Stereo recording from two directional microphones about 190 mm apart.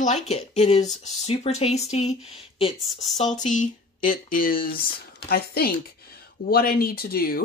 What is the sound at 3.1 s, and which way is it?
Speech, 40° left (ahead or behind).